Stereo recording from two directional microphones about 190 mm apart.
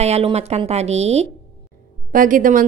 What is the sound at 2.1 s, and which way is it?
Speech, 45° right (ahead or behind).